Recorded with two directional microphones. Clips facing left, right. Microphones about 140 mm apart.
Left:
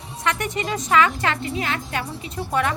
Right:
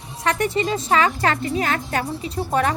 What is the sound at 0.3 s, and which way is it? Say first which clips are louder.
A woman's voice: right 4 dB; 30° right (ahead or behind).